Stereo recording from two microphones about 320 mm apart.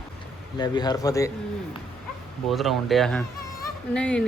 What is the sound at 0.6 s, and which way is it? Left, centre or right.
Speech, centre.